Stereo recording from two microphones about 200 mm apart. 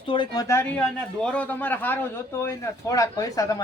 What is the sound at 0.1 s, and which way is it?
Speech, 20° left (ahead or behind).